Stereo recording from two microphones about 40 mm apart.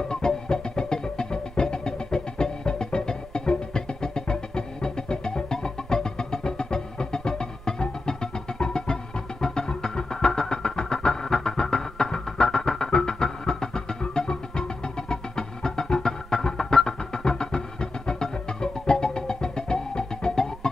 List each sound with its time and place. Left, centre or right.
0.1 s music: centre
9.4 s vehicle: centre